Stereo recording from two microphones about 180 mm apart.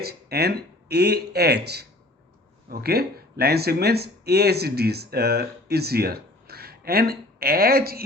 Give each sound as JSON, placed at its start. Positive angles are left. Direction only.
{"t": 0.0, "sound": "speech", "side_deg": -60}